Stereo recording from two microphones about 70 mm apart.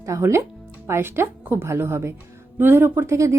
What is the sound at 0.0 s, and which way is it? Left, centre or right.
Speech, right.